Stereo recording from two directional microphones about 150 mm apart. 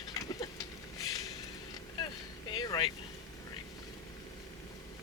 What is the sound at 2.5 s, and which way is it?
Vehicle, 30° left (ahead or behind).